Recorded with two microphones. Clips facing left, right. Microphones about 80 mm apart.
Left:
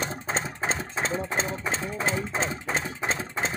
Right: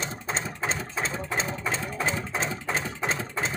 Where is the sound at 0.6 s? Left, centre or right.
Left.